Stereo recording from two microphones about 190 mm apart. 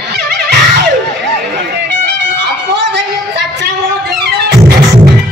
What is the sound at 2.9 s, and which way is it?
Music, 65° right (ahead or behind).